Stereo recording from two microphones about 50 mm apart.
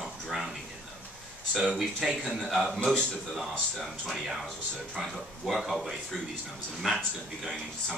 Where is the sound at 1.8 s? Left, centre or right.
Centre.